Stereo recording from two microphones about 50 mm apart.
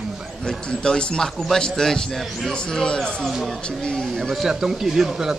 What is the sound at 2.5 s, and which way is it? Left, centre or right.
Speech, centre.